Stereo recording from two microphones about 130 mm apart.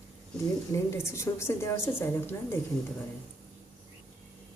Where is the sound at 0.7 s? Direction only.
20° left (ahead or behind).